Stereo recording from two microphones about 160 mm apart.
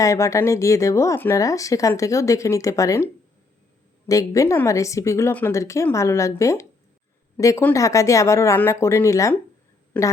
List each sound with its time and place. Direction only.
0.0 s a woman's voice: 20° left (ahead or behind)